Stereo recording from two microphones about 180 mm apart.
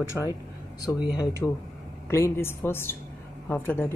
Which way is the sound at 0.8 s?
20° left (ahead or behind).